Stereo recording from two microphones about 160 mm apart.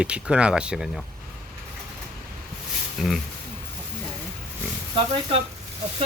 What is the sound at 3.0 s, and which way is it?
Speech, centre (ahead or behind).